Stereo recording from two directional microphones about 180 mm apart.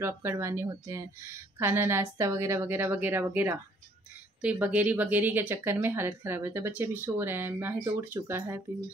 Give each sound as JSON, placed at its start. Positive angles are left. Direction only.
{"t": 0.0, "sound": "speech", "side_deg": -15}